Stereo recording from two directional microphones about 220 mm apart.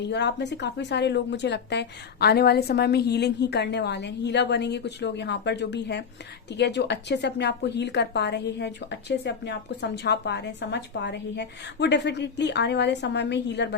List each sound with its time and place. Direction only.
0.0 s speech: 50° left (ahead or behind)